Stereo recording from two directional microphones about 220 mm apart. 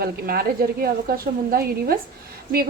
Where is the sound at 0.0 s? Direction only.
45° right (ahead or behind).